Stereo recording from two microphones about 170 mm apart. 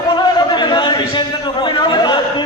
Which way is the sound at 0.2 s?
25° left (ahead or behind).